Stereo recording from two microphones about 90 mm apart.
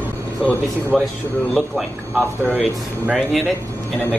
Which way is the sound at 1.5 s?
10° right (ahead or behind).